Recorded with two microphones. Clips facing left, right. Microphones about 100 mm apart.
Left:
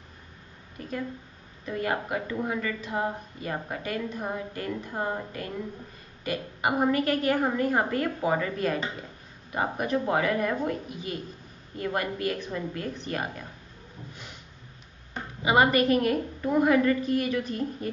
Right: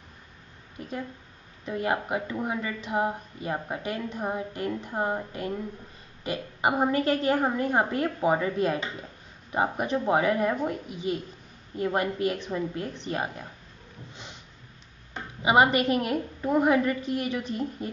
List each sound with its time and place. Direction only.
0.7 s speech: 20° right (ahead or behind)
15.4 s speech: 20° right (ahead or behind)